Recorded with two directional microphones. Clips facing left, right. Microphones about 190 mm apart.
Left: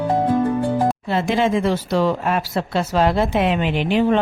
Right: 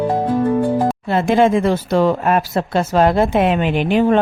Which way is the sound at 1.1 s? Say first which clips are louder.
Right 7 dB; 50° right (ahead or behind).